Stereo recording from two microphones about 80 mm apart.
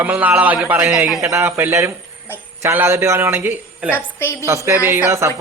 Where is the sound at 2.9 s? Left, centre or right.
Right.